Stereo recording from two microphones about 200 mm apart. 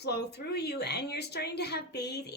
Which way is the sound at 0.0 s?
55° left (ahead or behind).